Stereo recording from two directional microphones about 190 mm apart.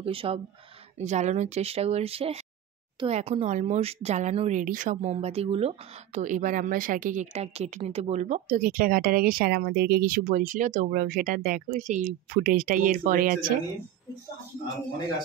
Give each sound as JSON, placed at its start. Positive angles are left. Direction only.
{"t": 0.0, "sound": "speech", "side_deg": -30}